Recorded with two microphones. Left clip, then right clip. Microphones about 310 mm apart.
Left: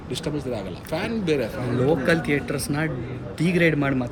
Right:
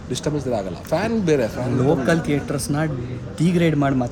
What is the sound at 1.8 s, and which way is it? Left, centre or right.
Speech, centre.